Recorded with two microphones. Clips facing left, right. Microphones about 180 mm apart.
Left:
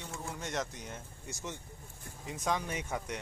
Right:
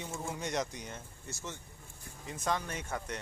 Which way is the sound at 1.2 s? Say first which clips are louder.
Left 2 dB; 15° left (ahead or behind).